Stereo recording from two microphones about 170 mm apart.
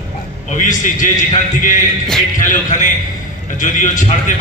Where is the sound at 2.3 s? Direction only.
50° left (ahead or behind).